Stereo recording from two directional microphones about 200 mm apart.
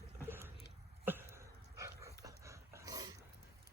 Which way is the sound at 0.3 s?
10° right (ahead or behind).